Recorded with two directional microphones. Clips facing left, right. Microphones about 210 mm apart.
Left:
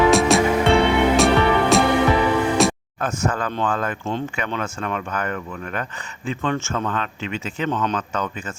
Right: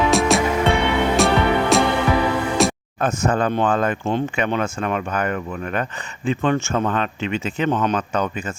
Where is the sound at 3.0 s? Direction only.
20° right (ahead or behind).